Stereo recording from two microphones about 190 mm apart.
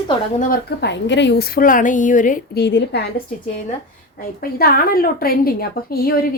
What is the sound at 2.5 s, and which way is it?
Speech, 60° left (ahead or behind).